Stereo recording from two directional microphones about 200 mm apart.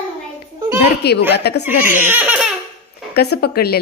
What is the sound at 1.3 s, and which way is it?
Speech, 55° left (ahead or behind).